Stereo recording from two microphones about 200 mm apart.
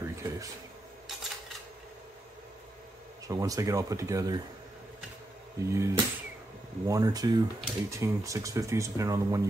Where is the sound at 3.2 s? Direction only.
15° right (ahead or behind).